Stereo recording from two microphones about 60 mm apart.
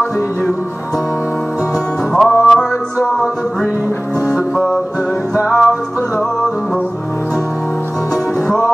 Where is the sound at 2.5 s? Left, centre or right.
Centre.